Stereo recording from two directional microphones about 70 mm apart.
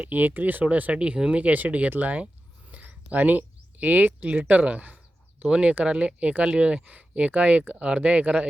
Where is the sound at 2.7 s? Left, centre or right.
Right.